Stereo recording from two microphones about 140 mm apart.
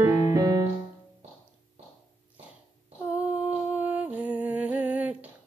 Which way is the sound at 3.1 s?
10° right (ahead or behind).